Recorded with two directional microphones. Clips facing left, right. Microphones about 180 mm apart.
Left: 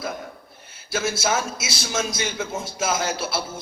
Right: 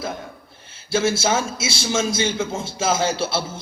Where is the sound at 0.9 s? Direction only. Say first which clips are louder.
Right 4 dB; 30° right (ahead or behind).